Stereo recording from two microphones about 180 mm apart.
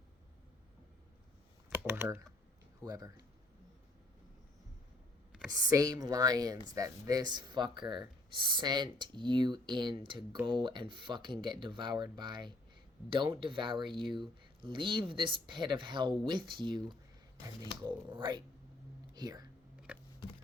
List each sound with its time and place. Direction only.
1.7 s computer keyboard: 10° right (ahead or behind)
2.8 s speech: 20° right (ahead or behind)
5.5 s speech: 20° right (ahead or behind)
19.9 s a sound: 5° right (ahead or behind)